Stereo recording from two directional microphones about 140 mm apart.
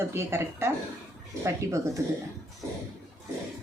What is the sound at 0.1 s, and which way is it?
Speech, 20° right (ahead or behind).